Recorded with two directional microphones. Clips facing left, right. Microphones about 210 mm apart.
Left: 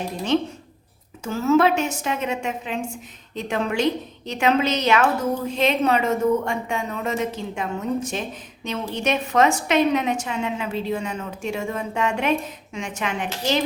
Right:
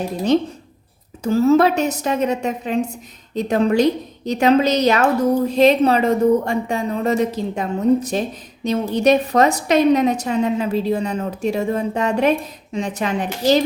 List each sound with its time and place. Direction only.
1.2 s a woman's voice: 35° right (ahead or behind)